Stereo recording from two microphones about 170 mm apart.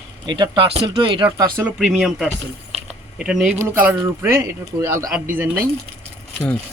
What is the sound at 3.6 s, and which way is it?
Speech, 10° right (ahead or behind).